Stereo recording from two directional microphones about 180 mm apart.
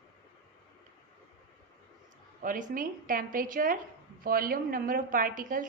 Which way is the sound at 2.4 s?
50° right (ahead or behind).